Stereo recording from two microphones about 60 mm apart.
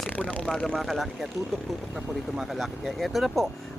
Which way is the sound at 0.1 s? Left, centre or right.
Left.